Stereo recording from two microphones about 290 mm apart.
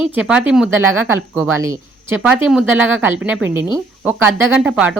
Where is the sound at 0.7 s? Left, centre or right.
Right.